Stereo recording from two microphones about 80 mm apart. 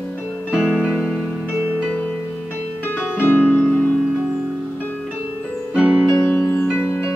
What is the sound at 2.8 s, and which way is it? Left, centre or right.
Music, left.